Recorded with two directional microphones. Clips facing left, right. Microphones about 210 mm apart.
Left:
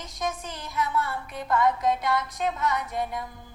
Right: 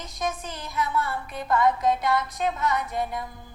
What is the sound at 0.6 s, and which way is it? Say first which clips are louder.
Music: even; 30° right (ahead or behind).